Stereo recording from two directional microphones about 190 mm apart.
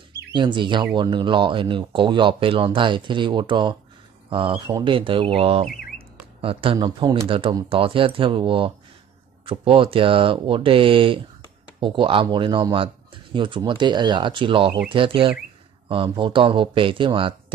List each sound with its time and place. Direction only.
0.3 s speech: 25° right (ahead or behind)